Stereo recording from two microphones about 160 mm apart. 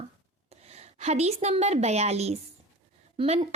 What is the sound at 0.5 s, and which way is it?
A woman's voice, 45° right (ahead or behind).